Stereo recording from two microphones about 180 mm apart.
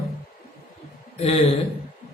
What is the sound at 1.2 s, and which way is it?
Speech, 35° left (ahead or behind).